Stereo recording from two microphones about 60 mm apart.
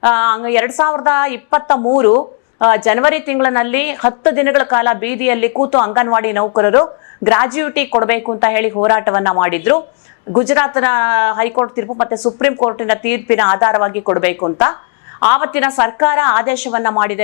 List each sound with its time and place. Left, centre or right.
0.0 s a woman's voice: left